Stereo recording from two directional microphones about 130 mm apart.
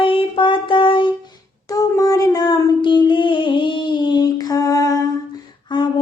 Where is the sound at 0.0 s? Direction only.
40° left (ahead or behind).